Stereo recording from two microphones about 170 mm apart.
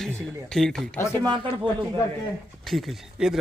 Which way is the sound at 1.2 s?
30° right (ahead or behind).